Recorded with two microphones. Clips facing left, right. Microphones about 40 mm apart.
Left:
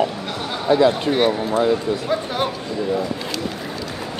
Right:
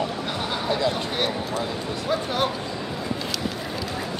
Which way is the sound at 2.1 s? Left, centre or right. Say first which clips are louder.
Right 1 dB; centre.